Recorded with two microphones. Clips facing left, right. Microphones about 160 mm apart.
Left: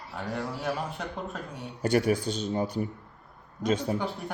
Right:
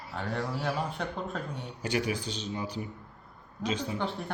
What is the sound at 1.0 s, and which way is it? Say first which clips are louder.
Speech: right 1 dB; 5° left (ahead or behind).